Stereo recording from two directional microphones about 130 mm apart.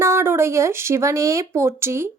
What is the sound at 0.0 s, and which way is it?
Speech, 20° right (ahead or behind).